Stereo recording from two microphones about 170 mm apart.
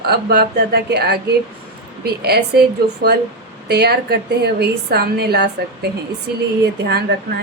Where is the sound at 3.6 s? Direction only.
75° right (ahead or behind).